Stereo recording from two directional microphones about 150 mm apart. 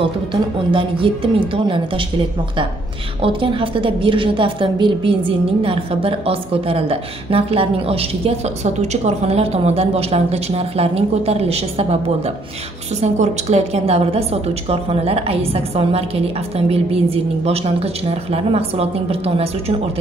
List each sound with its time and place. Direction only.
0.0 s a woman's voice: 35° right (ahead or behind)
3.2 s a woman's voice: 35° right (ahead or behind)
13.0 s a woman's voice: 50° right (ahead or behind)